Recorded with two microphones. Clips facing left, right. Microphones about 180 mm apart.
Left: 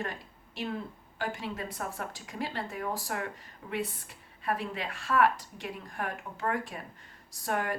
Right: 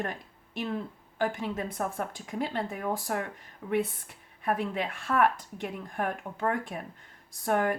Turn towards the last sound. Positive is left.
turn(degrees=-55)  # may be behind; listen again after turning